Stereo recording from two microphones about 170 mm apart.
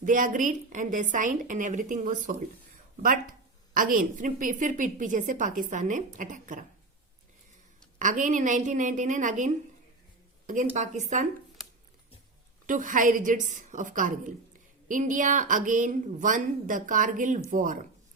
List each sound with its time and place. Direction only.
0.0 s a woman's voice: 50° right (ahead or behind)
7.9 s a woman's voice: 50° right (ahead or behind)
12.6 s a woman's voice: 50° right (ahead or behind)